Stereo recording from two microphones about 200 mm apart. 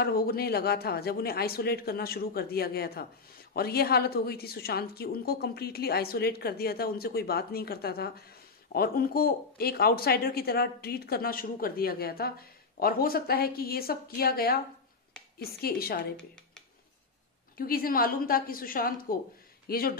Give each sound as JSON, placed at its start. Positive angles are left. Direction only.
{"t": 0.0, "sound": "speech", "side_deg": 50}
{"t": 17.6, "sound": "speech", "side_deg": 45}